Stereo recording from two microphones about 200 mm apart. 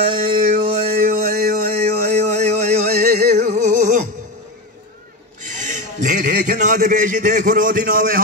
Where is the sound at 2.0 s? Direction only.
35° right (ahead or behind).